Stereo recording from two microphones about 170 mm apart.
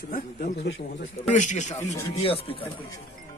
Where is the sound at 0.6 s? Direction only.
90° left.